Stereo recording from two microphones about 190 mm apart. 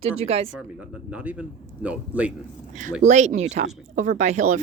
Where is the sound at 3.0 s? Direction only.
40° right (ahead or behind).